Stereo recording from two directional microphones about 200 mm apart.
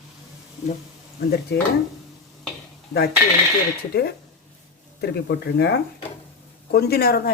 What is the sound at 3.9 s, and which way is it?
Speech, 50° left (ahead or behind).